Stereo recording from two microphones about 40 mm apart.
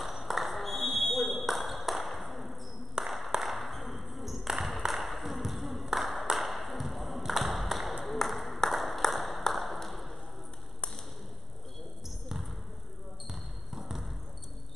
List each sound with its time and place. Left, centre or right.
0.0 s ping: centre
3.0 s a sound: centre
3.3 s ping: centre
5.9 s clapping: centre
6.3 s a sound: centre
9.5 s ping: centre
13.3 s basketball bounce: centre